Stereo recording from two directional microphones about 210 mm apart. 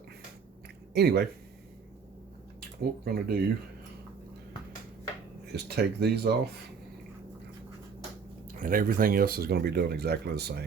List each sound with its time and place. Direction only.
0.9 s speech: 50° right (ahead or behind)
2.6 s speech: 45° right (ahead or behind)
5.5 s speech: 50° right (ahead or behind)
8.5 s speech: 40° right (ahead or behind)